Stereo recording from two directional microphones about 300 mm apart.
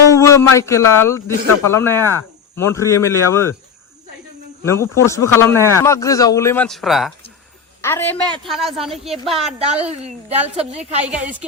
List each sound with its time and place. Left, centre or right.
0.1 s speech: centre
4.6 s a woman's voice: centre
9.8 s a woman's voice: right
10.8 s a woman's voice: centre